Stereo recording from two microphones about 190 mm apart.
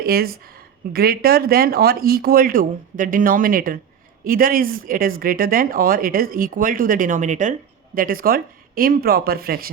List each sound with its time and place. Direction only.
0.0 s speech: 55° right (ahead or behind)